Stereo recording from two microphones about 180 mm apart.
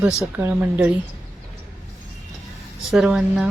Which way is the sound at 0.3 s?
10° right (ahead or behind).